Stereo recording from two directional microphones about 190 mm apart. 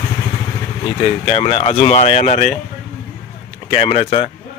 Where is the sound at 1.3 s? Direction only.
30° left (ahead or behind).